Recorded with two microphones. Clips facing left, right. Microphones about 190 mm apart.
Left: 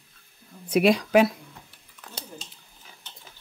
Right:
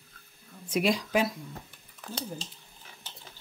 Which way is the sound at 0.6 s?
65° left (ahead or behind).